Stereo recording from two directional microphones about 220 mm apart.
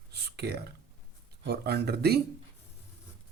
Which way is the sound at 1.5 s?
45° right (ahead or behind).